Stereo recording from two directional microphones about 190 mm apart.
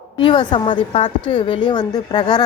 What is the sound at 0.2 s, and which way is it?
A woman's voice, 25° left (ahead or behind).